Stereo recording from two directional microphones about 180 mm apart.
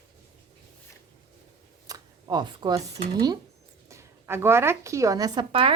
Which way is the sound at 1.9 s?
20° right (ahead or behind).